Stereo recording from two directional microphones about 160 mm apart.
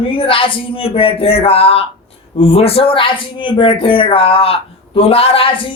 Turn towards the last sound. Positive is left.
turn(degrees=35)  # may be behind; listen again after turning